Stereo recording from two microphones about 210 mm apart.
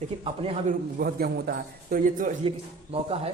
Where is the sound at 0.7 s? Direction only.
45° right (ahead or behind).